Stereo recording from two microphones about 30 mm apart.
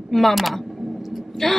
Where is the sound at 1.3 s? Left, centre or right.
Centre.